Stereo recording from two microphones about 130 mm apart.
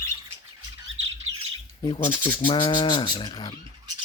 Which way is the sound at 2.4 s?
40° left (ahead or behind).